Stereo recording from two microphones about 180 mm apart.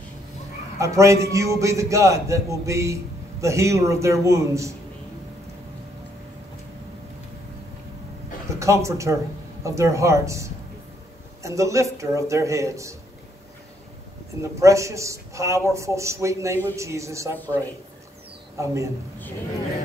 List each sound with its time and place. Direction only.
0.7 s a man's voice: 15° right (ahead or behind)
8.5 s a man's voice: 15° right (ahead or behind)
14.4 s a man's voice: 15° right (ahead or behind)
18.6 s a man's voice: 15° right (ahead or behind)